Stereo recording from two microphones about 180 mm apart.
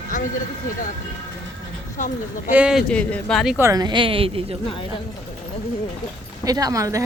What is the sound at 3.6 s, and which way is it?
Speech, 20° right (ahead or behind).